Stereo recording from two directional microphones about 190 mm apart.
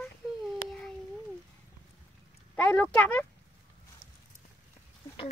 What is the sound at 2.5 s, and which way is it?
Speech, 10° left (ahead or behind).